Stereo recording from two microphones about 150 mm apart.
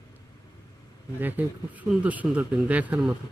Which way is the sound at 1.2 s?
10° right (ahead or behind).